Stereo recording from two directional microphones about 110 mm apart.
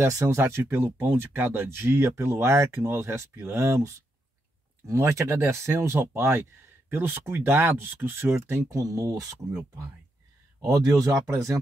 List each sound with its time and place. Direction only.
0.0 s speech: 25° right (ahead or behind)
11.0 s speech: 25° right (ahead or behind)